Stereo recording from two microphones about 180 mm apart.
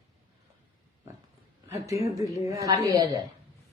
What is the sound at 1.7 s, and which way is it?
A woman's voice, 15° right (ahead or behind).